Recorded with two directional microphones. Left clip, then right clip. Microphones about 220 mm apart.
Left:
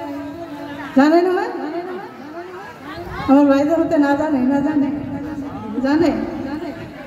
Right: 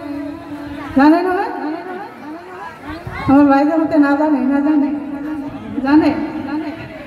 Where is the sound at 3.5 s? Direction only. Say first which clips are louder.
Right 2 dB; 35° left (ahead or behind).